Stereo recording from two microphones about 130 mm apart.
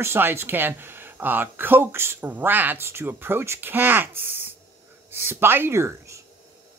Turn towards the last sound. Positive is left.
turn(degrees=-20)  # may be behind; listen again after turning